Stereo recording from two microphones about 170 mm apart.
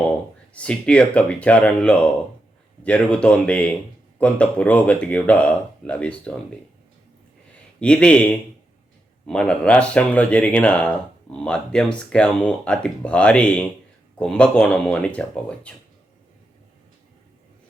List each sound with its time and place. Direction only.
0.5 s speech: 5° left (ahead or behind)
7.8 s speech: 5° left (ahead or behind)